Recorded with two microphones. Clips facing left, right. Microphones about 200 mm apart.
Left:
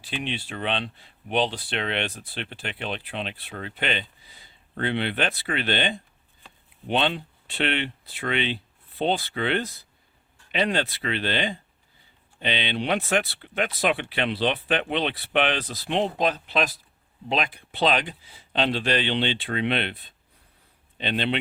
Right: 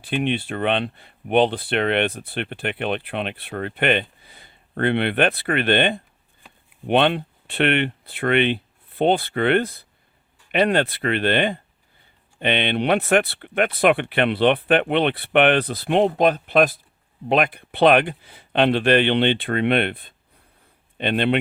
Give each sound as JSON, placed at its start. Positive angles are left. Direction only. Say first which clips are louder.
{"t": 0.0, "sound": "speech", "louder": "right 9 dB", "side_deg": -55}